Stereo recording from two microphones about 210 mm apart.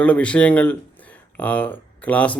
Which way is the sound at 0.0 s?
5° left (ahead or behind).